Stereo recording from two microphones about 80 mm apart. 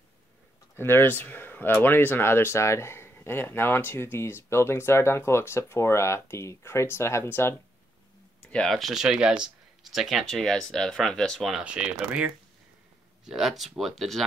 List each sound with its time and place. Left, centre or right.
0.7 s speech: left
8.4 s a sound: centre
8.7 s speech: centre
11.6 s speech: centre